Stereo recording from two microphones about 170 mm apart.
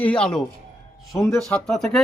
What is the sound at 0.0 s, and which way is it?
Speech, 5° left (ahead or behind).